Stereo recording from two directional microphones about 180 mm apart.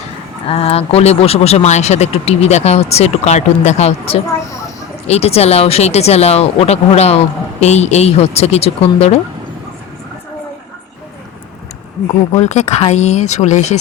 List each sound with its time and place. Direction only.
0.4 s speech: 35° left (ahead or behind)
12.3 s speech: 40° left (ahead or behind)